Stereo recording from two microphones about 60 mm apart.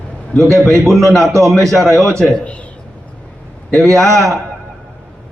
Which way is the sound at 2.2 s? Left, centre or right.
Centre.